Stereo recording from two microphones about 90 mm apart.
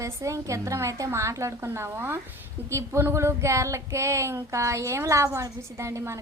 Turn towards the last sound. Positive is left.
turn(degrees=-30)  # may be behind; listen again after turning